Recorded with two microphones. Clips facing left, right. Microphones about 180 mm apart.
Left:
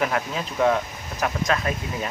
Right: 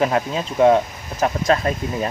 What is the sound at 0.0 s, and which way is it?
Speech, 30° right (ahead or behind).